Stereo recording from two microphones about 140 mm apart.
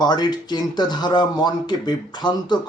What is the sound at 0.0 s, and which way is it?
Speech, 30° left (ahead or behind).